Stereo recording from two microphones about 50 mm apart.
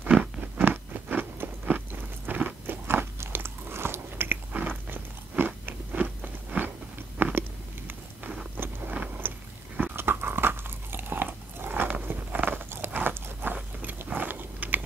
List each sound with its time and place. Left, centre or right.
0.6 s biting: right
4.5 s chewing: right
5.4 s biting: right
5.9 s biting: right
7.2 s chewing: right
8.2 s vehicle: right
9.8 s crunch: right
12.4 s biting: right